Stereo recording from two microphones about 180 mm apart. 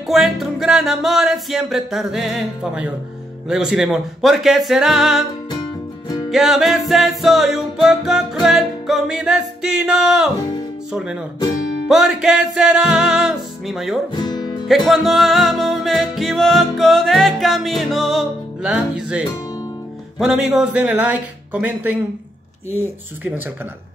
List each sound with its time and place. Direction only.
0.0 s music: centre (ahead or behind)
6.3 s music: centre (ahead or behind)
10.9 s speech: 5° right (ahead or behind)
11.9 s music: centre (ahead or behind)
14.1 s music: 25° left (ahead or behind)
14.7 s music: centre (ahead or behind)
20.2 s speech: 5° right (ahead or behind)
22.8 s speech: 10° right (ahead or behind)